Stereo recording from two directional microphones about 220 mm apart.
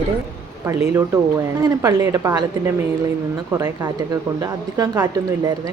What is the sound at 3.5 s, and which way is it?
A woman's voice, 15° right (ahead or behind).